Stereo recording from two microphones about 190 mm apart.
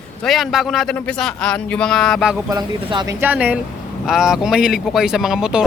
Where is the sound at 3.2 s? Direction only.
10° right (ahead or behind).